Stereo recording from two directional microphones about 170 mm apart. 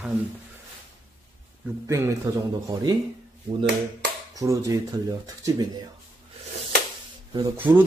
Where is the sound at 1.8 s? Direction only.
15° right (ahead or behind).